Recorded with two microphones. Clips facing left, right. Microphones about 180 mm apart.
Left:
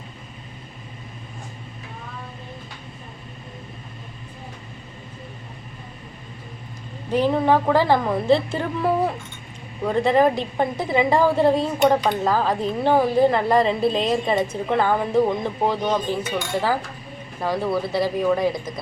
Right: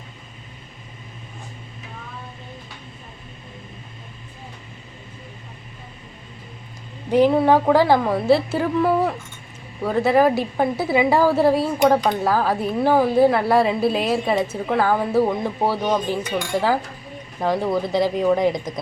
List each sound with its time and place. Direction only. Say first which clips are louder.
7.1 s a woman's voice: right 3 dB; 15° right (ahead or behind)